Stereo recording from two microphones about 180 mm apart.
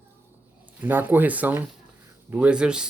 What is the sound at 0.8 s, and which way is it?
Speech, 10° right (ahead or behind).